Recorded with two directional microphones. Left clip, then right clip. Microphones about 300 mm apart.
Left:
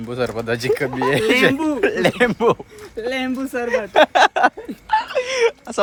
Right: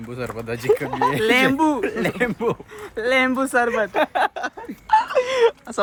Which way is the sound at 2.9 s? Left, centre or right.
Centre.